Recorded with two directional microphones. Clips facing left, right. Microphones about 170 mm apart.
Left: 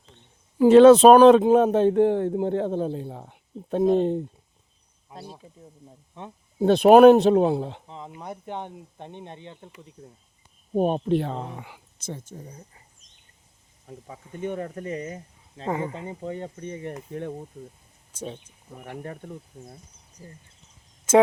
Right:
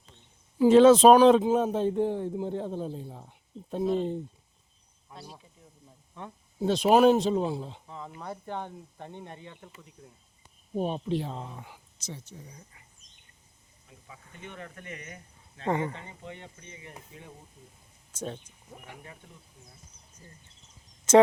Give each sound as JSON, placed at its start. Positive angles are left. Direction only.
{"t": 0.6, "sound": "speech", "side_deg": 65}
{"t": 5.1, "sound": "speech", "side_deg": 20}
{"t": 6.6, "sound": "speech", "side_deg": 60}
{"t": 7.9, "sound": "speech", "side_deg": 20}
{"t": 10.8, "sound": "speech", "side_deg": 55}
{"t": 12.0, "sound": "speech", "side_deg": 50}
{"t": 13.8, "sound": "speech", "side_deg": 45}
{"t": 15.6, "sound": "speech", "side_deg": 5}
{"t": 16.2, "sound": "speech", "side_deg": 40}
{"t": 18.1, "sound": "speech", "side_deg": 10}
{"t": 18.9, "sound": "speech", "side_deg": 55}